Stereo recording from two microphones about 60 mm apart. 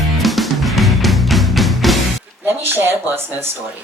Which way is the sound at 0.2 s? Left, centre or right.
Centre.